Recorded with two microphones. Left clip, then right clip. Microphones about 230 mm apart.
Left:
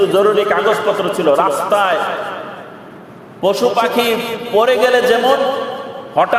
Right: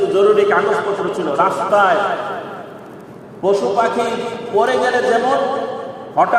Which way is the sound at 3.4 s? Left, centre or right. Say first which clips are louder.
Left 1 dB; left.